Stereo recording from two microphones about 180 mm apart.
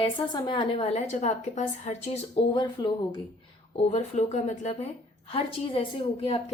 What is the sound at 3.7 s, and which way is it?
A woman's voice, 40° left (ahead or behind).